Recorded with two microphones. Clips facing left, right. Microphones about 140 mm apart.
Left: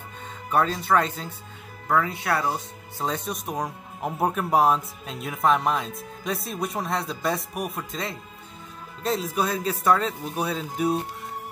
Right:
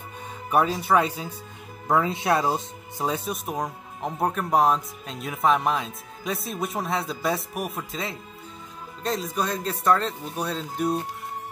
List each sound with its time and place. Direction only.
0.5 s speech: 10° right (ahead or behind)
1.9 s speech: 25° right (ahead or behind)
3.1 s speech: 5° right (ahead or behind)